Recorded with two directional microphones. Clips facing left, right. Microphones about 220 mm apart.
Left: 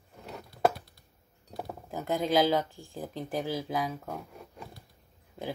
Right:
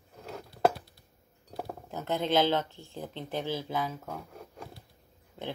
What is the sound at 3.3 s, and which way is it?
Speech, centre (ahead or behind).